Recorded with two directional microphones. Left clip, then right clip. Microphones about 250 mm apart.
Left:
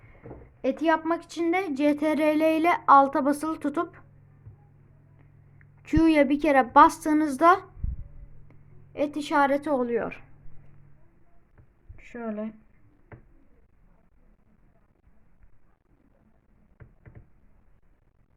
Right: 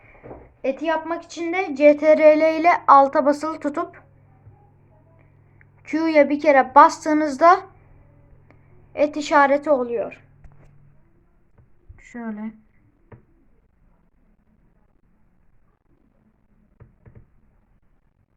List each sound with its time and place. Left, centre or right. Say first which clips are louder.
0.6 s speech: right 1 dB; left
5.1 s a woman's voice: right 5 dB; left
11.9 s speech: even; centre